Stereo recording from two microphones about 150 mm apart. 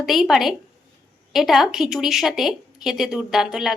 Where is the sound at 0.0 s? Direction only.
Centre (ahead or behind).